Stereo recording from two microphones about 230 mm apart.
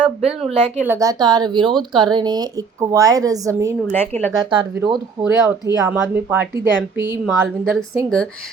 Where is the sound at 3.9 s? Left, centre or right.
Centre.